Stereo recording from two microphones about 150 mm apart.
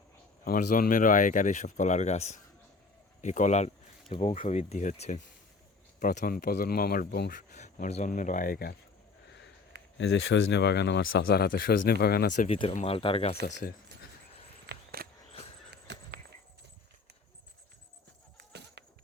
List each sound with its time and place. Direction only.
0.4 s speech: 70° left (ahead or behind); by 3.7 s 50° left (ahead or behind)
4.1 s speech: 35° left (ahead or behind)
6.0 s speech: 60° left (ahead or behind); by 7.3 s 80° left
7.5 s speech: 50° left (ahead or behind); by 8.7 s 80° left
9.7 s a sound: 90° right
10.7 s speech: 90° left
12.5 s speech: 35° left (ahead or behind)
13.4 s speech: 55° left (ahead or behind)
14.7 s a sound: 90° right